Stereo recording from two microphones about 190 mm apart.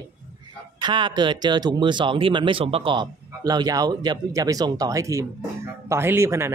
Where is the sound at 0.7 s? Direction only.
25° right (ahead or behind).